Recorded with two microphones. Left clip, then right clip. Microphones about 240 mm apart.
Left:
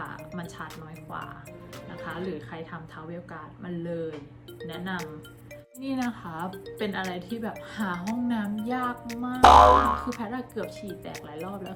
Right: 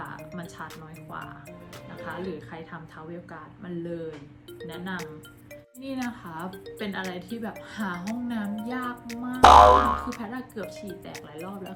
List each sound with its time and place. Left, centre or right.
0.0 s music: centre
2.0 s speech: centre